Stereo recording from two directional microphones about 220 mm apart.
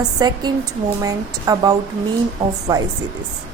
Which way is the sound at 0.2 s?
20° right (ahead or behind).